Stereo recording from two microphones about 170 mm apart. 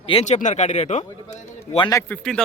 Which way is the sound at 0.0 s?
35° left (ahead or behind).